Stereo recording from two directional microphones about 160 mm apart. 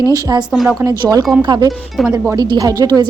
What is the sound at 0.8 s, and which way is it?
Speech, 25° right (ahead or behind).